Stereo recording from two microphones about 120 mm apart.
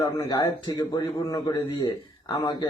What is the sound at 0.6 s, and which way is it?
A man's voice, 35° left (ahead or behind).